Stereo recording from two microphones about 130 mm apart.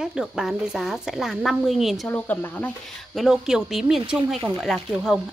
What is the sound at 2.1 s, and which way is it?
Speech, 15° left (ahead or behind).